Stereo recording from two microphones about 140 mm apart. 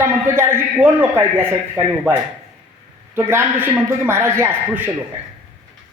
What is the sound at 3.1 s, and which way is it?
A man's voice, 15° right (ahead or behind).